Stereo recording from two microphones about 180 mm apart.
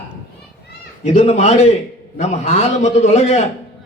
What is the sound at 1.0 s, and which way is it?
A man's voice, 35° left (ahead or behind).